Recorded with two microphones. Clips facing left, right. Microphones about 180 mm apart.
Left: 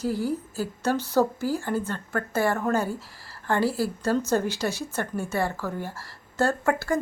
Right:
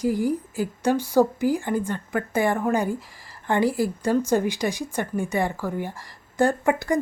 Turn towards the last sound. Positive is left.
turn(degrees=-15)  # may be behind; listen again after turning